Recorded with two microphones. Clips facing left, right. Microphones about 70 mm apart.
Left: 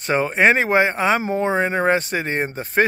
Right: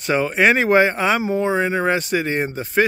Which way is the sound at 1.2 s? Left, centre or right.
Left.